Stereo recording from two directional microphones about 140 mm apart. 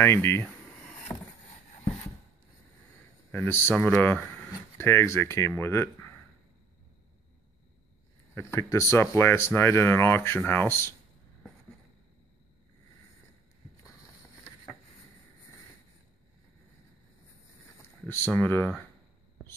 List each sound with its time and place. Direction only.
0.0 s speech: 15° left (ahead or behind)
1.1 s vehicle: 15° left (ahead or behind)
3.3 s speech: 15° left (ahead or behind)
8.4 s speech: 20° left (ahead or behind)
17.8 s speech: 15° left (ahead or behind)